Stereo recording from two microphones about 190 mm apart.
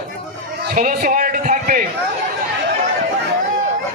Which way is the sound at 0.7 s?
45° right (ahead or behind).